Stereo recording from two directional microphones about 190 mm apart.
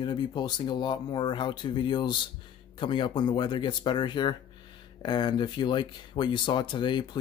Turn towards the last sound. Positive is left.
turn(degrees=25)  # may be behind; listen again after turning